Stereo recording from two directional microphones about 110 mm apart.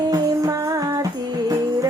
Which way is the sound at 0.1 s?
30° right (ahead or behind).